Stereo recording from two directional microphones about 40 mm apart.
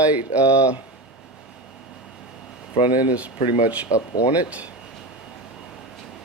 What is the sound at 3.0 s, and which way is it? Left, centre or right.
Speech, right.